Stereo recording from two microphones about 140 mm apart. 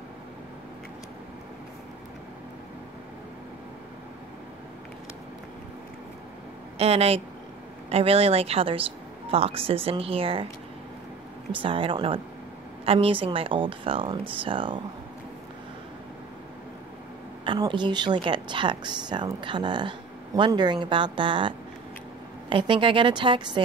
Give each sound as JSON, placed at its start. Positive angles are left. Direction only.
{"t": 6.8, "sound": "speech", "side_deg": -45}
{"t": 11.5, "sound": "a woman's voice", "side_deg": -40}
{"t": 17.5, "sound": "a woman's voice", "side_deg": -35}